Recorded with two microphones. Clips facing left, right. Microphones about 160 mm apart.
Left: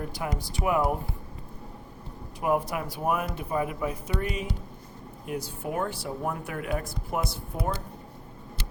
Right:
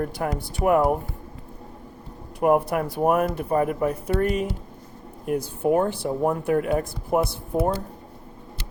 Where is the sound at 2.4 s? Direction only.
55° right (ahead or behind).